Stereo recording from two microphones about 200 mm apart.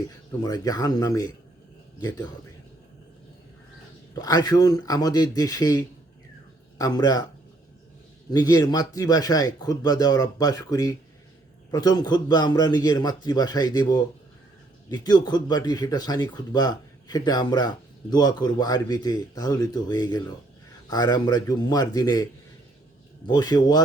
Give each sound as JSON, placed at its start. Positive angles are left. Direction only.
{"t": 0.3, "sound": "speech", "side_deg": 20}
{"t": 4.1, "sound": "speech", "side_deg": 20}
{"t": 8.3, "sound": "speech", "side_deg": 20}